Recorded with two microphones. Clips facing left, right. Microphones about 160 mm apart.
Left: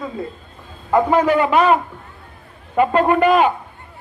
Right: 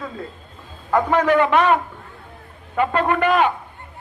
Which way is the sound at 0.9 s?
15° left (ahead or behind).